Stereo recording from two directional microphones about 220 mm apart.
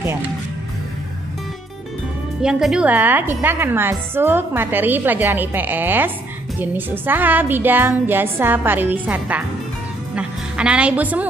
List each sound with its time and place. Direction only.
0.0 s speech: 10° right (ahead or behind)
2.4 s a woman's voice: centre (ahead or behind)